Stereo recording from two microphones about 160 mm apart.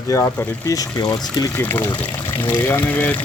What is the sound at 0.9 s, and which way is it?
Speech, 25° left (ahead or behind).